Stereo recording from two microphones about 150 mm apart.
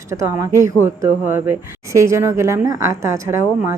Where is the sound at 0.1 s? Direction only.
20° right (ahead or behind).